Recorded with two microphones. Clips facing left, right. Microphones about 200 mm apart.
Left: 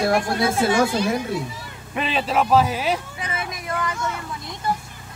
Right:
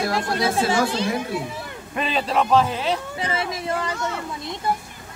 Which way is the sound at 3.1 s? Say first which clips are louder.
Right 4 dB; 30° right (ahead or behind).